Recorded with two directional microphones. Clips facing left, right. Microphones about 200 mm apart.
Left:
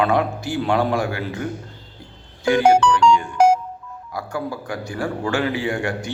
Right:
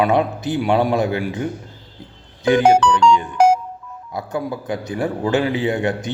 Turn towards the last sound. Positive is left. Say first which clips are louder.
# right 4 dB
turn(degrees=-20)  # may be behind; listen again after turning